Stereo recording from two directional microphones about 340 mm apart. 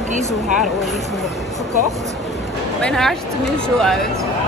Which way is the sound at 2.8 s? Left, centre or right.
Centre.